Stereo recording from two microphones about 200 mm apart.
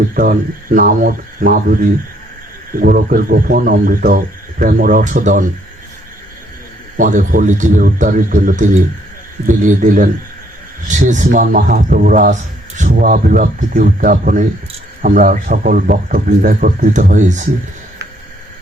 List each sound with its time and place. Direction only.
0.1 s a man's voice: 45° right (ahead or behind)
6.9 s a man's voice: 40° right (ahead or behind)